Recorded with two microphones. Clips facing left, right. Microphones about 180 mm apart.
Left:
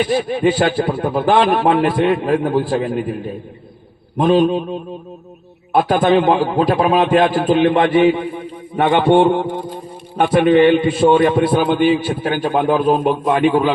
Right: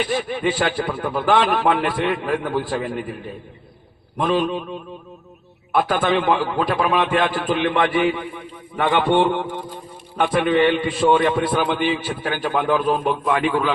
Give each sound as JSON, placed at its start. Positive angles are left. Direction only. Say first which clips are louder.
{"t": 0.1, "sound": "a man's voice", "louder": "left 6 dB", "side_deg": 30}
{"t": 4.2, "sound": "a man's voice", "louder": "left 7 dB", "side_deg": 30}